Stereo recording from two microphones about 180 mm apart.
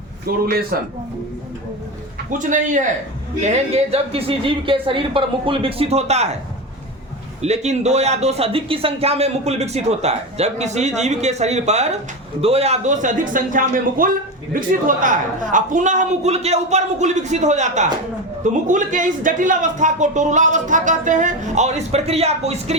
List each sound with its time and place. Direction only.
0.3 s a man's voice: 55° right (ahead or behind)
2.4 s speech: 45° right (ahead or behind)
7.4 s speech: 35° right (ahead or behind)